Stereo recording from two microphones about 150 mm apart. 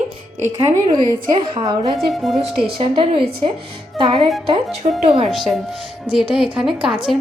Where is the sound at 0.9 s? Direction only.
35° right (ahead or behind).